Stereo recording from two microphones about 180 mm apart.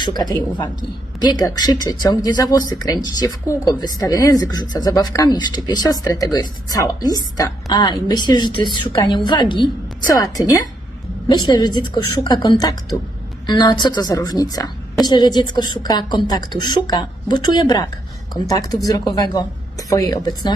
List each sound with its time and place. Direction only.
0.0 s speech: 25° left (ahead or behind)